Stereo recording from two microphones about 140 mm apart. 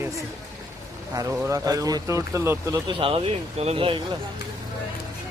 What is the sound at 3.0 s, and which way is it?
Speech, 40° right (ahead or behind).